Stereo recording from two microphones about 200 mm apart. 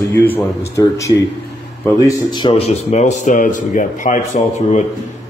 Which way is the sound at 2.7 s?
35° left (ahead or behind).